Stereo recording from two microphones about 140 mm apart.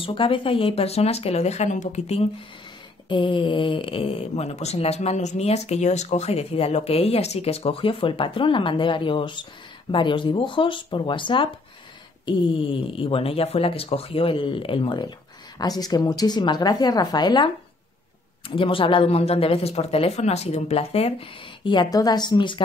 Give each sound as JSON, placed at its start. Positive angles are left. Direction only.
{"t": 0.0, "sound": "speech", "side_deg": 40}
{"t": 3.1, "sound": "a woman's voice", "side_deg": 35}
{"t": 18.5, "sound": "speech", "side_deg": 40}
{"t": 21.6, "sound": "speech", "side_deg": 30}